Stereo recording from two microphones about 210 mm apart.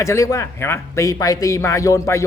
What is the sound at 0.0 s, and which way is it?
Speech, 15° left (ahead or behind).